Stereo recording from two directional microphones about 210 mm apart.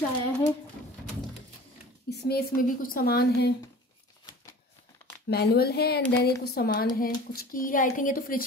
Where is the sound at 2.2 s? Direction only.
45° left (ahead or behind).